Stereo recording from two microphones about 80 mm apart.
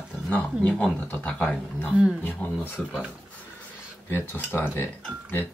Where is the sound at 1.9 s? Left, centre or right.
Centre.